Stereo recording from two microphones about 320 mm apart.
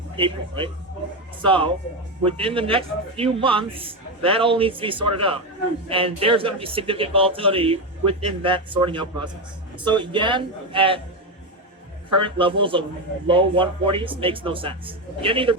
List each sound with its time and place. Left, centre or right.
0.2 s speech: centre
12.1 s speech: centre